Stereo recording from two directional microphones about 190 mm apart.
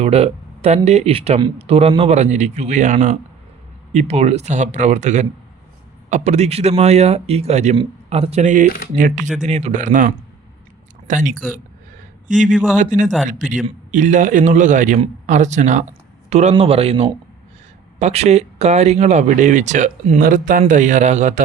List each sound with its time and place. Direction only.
0.0 s speech: 35° right (ahead or behind)
11.1 s speech: 45° right (ahead or behind)
12.7 s speech: 40° right (ahead or behind)